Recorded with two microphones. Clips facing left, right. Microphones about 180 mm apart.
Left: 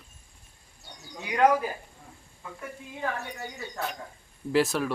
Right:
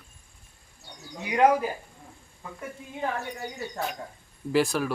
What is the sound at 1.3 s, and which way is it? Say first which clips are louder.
Speech: right 1 dB; 20° right (ahead or behind).